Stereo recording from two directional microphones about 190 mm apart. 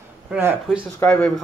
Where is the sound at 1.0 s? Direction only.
5° left (ahead or behind).